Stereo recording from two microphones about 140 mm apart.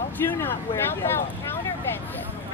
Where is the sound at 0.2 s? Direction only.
15° left (ahead or behind).